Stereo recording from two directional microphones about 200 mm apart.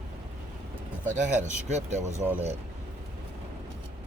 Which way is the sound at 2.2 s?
10° right (ahead or behind).